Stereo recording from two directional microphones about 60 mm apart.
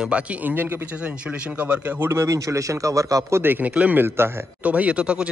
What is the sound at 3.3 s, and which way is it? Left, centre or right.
Speech, right.